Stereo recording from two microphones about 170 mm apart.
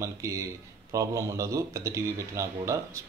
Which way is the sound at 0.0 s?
15° right (ahead or behind).